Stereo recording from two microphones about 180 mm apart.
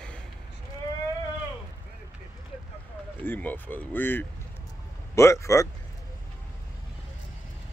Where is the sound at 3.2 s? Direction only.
10° left (ahead or behind).